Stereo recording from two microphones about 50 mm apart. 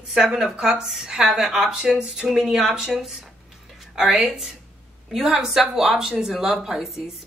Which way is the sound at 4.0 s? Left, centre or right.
Centre.